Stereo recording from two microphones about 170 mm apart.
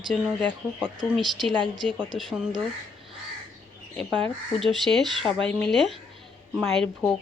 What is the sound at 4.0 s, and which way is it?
Speech, 5° left (ahead or behind).